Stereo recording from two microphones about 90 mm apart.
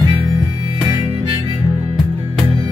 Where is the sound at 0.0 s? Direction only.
50° right (ahead or behind).